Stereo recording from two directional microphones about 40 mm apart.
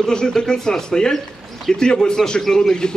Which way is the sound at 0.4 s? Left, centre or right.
Centre.